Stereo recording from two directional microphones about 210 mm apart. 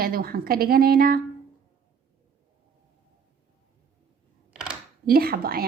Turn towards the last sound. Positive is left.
turn(degrees=-45)  # may be behind; listen again after turning